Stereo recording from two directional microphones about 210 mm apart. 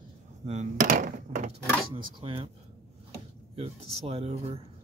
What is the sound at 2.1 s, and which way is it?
Speech, 25° right (ahead or behind).